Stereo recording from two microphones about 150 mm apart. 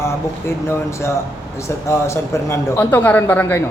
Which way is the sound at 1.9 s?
20° left (ahead or behind).